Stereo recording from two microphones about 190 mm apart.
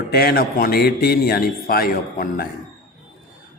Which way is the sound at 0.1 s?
55° left (ahead or behind).